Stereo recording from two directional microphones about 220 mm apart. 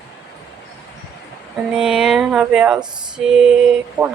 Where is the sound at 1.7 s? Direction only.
5° right (ahead or behind).